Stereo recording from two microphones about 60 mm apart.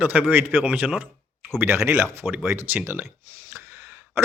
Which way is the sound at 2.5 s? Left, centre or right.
Right.